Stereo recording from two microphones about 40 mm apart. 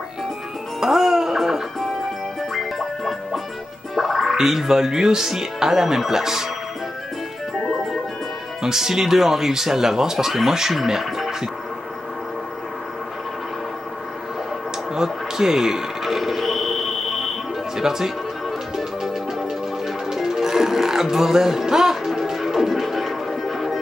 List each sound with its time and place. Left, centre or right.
0.7 s music: centre
4.4 s speech: centre
8.6 s speech: centre
15.0 s music: centre
17.7 s speech: centre
20.1 s music: centre